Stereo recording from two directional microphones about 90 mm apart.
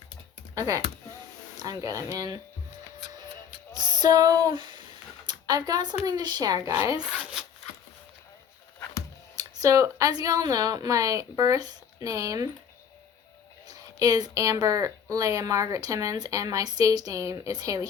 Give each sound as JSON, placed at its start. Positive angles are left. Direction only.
{"t": 0.5, "sound": "speech", "side_deg": -40}
{"t": 3.7, "sound": "music", "side_deg": -50}
{"t": 4.5, "sound": "speech", "side_deg": -60}
{"t": 5.2, "sound": "speech", "side_deg": -50}
{"t": 7.0, "sound": "zipper", "side_deg": -10}
{"t": 9.3, "sound": "speech", "side_deg": -40}
{"t": 13.7, "sound": "speech", "side_deg": -45}